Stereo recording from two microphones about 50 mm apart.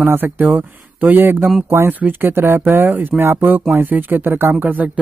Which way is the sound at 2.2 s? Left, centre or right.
Right.